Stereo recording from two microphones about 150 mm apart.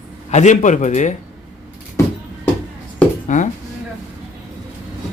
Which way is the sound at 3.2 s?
55° left (ahead or behind).